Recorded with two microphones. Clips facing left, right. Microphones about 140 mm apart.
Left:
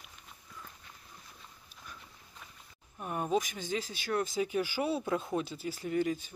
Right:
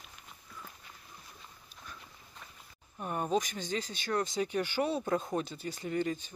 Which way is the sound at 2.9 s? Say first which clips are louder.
Even; 5° left (ahead or behind).